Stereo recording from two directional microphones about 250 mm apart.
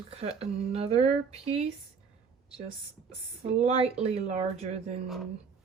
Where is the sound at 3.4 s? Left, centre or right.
Right.